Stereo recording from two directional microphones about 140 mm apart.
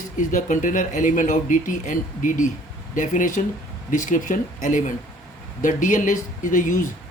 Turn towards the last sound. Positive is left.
turn(degrees=65)  # may be behind; listen again after turning